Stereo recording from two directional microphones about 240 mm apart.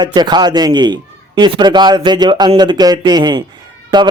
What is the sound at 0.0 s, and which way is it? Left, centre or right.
A man's voice, centre.